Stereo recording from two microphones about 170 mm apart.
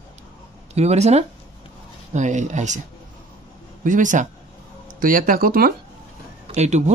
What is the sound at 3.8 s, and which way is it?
Speech, 50° right (ahead or behind).